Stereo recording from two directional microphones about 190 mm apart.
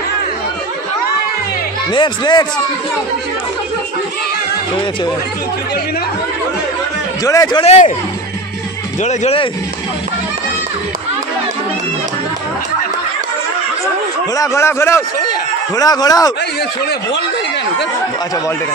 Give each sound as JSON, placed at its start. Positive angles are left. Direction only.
{"t": 1.9, "sound": "speech", "side_deg": 25}
{"t": 7.2, "sound": "speech", "side_deg": 20}
{"t": 7.6, "sound": "speech", "side_deg": 35}
{"t": 9.0, "sound": "speech", "side_deg": 35}
{"t": 14.3, "sound": "a man's voice", "side_deg": 15}